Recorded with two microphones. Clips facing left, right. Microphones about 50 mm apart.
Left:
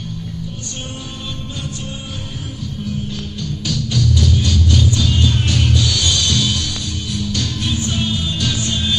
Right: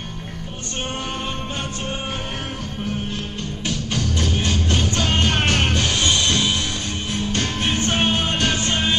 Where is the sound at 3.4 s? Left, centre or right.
Right.